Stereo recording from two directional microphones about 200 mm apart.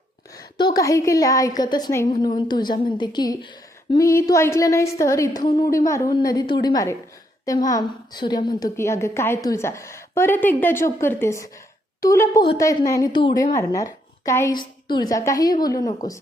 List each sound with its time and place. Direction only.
0.3 s a woman's voice: 20° left (ahead or behind)